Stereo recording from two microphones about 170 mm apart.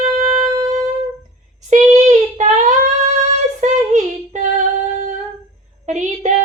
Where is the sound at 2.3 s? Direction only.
45° right (ahead or behind).